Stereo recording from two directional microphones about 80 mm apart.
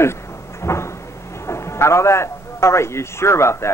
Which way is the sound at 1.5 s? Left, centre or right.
Left.